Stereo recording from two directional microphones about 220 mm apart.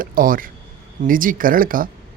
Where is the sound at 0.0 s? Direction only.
40° right (ahead or behind).